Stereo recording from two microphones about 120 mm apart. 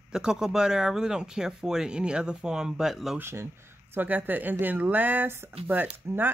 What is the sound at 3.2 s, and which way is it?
Speech, 20° right (ahead or behind).